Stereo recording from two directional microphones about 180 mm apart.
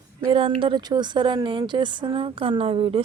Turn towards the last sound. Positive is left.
turn(degrees=-30)  # may be behind; listen again after turning